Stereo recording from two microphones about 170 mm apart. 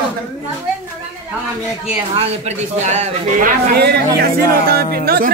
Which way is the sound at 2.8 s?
45° right (ahead or behind).